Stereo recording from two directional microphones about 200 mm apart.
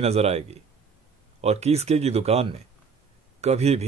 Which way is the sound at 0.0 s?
30° right (ahead or behind).